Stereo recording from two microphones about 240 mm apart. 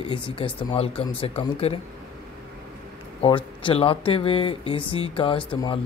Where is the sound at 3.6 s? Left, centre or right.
Left.